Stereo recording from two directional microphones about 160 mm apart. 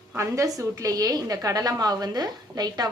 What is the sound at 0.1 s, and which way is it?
A woman's voice, 20° right (ahead or behind).